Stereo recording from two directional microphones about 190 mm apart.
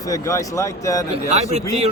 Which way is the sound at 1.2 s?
35° right (ahead or behind).